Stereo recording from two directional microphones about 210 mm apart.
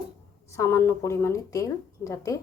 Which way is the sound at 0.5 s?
10° left (ahead or behind).